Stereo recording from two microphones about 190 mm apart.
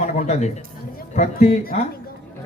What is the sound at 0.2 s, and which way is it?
A man's voice, 35° left (ahead or behind).